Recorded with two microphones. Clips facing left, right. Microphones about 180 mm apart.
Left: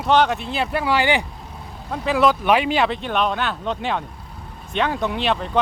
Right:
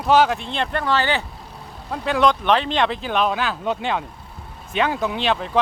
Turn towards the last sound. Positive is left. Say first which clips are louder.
# even
turn(degrees=0)  # may be behind; listen again after turning